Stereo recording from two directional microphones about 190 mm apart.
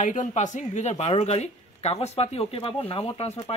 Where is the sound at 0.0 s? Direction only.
40° left (ahead or behind).